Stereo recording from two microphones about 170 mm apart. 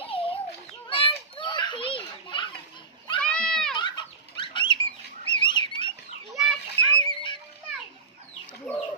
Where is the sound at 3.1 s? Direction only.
5° left (ahead or behind).